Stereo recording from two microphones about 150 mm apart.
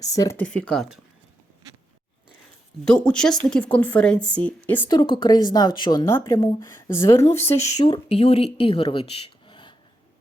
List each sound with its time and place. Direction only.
0.0 s speech: 25° left (ahead or behind)
0.3 s a woman's voice: 10° left (ahead or behind)
2.8 s a woman's voice: 5° left (ahead or behind)
4.9 s speech: 30° left (ahead or behind)
6.1 s a woman's voice: 20° left (ahead or behind)
7.5 s speech: 50° left (ahead or behind)
7.8 s speech: 30° left (ahead or behind)
8.1 s speech: 45° left (ahead or behind)